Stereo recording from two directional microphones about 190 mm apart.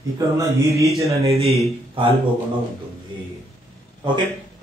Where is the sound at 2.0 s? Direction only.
30° right (ahead or behind).